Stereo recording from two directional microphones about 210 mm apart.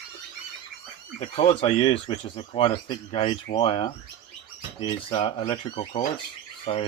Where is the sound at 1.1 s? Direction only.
35° left (ahead or behind).